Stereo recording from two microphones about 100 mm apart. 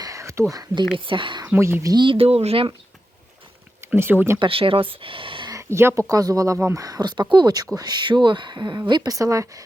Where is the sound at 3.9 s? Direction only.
25° right (ahead or behind).